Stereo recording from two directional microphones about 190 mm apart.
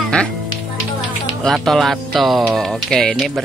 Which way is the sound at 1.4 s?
Centre (ahead or behind).